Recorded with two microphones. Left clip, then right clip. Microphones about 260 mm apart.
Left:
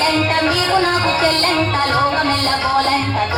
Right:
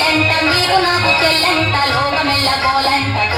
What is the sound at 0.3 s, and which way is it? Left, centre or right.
Music, right.